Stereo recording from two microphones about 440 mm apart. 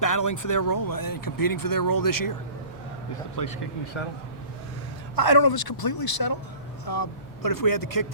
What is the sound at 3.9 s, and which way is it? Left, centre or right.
Speech, left.